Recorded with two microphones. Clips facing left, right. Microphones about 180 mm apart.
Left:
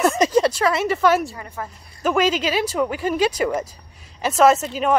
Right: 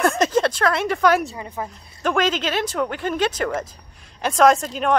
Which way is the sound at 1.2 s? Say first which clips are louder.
Right 1 dB; 20° right (ahead or behind).